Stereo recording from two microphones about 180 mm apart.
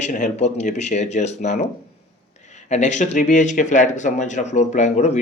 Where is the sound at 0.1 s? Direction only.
45° left (ahead or behind).